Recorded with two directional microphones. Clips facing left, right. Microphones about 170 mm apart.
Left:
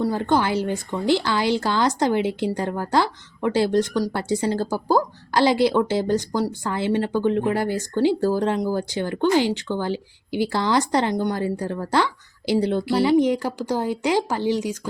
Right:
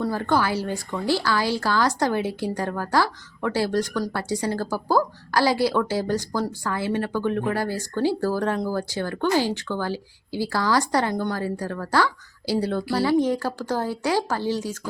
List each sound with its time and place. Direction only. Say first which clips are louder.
0.0 s speech: left 2 dB; 20° left (ahead or behind)